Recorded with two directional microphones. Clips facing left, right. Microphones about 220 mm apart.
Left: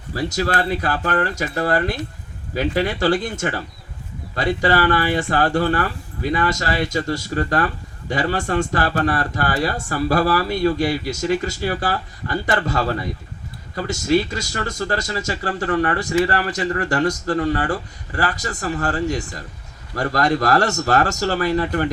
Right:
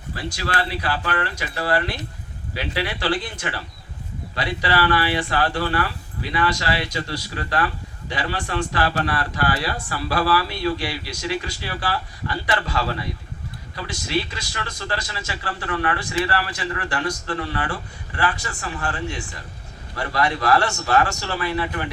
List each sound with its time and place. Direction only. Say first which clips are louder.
0.1 s speech: left 6 dB; 45° left (ahead or behind)